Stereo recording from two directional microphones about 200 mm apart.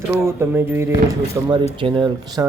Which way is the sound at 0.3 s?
10° right (ahead or behind).